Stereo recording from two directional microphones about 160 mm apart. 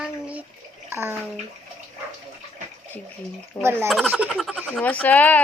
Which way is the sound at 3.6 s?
15° right (ahead or behind).